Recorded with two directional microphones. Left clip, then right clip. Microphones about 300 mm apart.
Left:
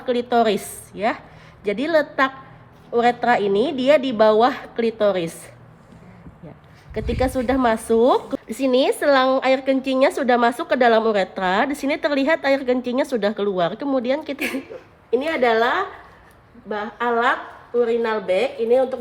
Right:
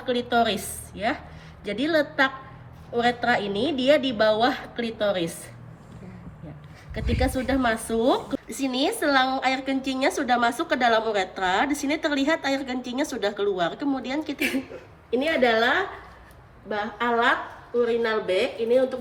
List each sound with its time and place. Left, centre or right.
0.0 s a woman's voice: left
7.1 s a woman's voice: left
15.1 s speech: centre